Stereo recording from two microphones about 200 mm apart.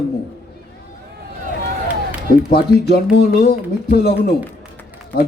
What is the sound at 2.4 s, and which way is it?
A man's voice, 50° left (ahead or behind).